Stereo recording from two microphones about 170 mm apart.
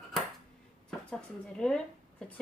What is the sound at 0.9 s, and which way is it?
Speech, 5° left (ahead or behind).